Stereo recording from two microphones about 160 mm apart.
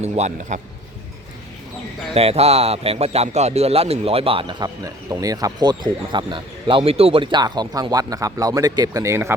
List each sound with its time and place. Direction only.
0.0 s speech: 45° right (ahead or behind)
2.1 s a man's voice: 40° right (ahead or behind); by 9.3 s 15° right (ahead or behind)